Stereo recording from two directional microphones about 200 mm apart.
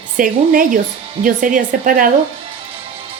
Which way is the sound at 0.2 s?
40° right (ahead or behind).